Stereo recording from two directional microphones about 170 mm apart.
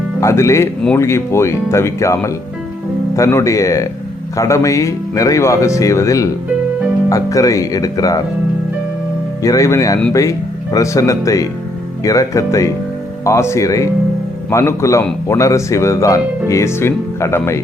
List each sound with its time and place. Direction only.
0.2 s speech: 15° left (ahead or behind)
9.4 s speech: 20° left (ahead or behind)